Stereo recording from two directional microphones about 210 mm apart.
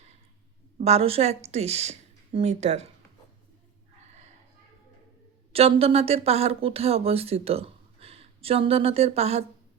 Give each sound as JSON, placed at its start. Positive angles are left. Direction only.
{"t": 0.8, "sound": "speech", "side_deg": -30}
{"t": 5.5, "sound": "speech", "side_deg": -30}